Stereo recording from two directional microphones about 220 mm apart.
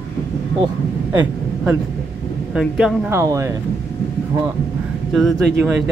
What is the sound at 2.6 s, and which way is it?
Speech, 5° right (ahead or behind).